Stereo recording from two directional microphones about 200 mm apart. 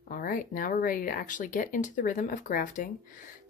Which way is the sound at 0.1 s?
45° left (ahead or behind).